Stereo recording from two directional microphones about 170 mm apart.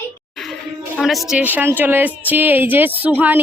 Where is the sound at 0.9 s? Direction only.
Centre (ahead or behind).